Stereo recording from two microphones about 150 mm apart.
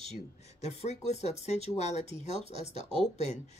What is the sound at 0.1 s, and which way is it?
Speech, 45° left (ahead or behind).